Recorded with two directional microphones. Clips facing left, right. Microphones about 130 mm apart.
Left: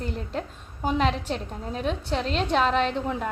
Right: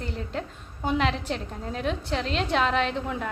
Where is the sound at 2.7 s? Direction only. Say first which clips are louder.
Left 2 dB; 35° left (ahead or behind).